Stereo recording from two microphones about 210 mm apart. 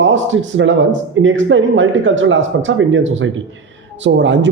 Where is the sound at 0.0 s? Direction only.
65° right (ahead or behind).